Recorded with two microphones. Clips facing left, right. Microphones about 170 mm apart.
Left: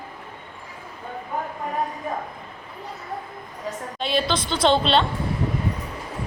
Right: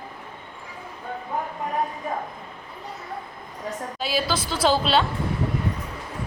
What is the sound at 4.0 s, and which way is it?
A woman's voice, 5° right (ahead or behind).